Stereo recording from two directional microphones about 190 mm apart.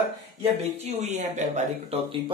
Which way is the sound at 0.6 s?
35° right (ahead or behind).